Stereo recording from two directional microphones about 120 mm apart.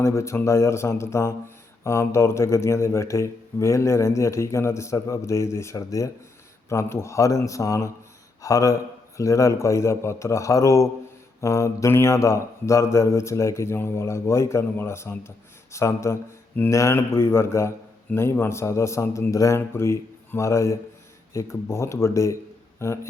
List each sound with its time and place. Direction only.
0.0 s speech: 25° left (ahead or behind)